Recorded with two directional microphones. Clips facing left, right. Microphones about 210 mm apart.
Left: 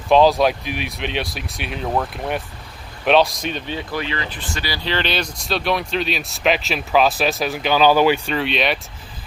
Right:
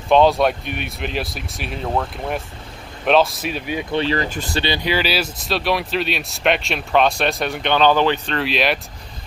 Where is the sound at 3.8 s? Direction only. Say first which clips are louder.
Right 5 dB; 25° right (ahead or behind).